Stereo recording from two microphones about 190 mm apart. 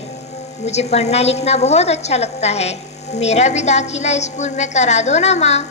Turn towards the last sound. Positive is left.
turn(degrees=35)  # may be behind; listen again after turning